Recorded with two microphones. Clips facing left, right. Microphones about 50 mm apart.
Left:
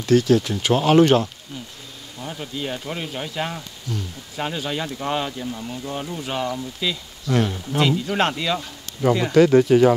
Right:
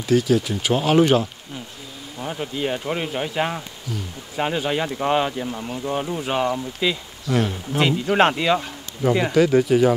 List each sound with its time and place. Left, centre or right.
0.0 s speech: centre
2.1 s speech: right
7.2 s speech: centre
8.0 s speech: right
9.3 s speech: centre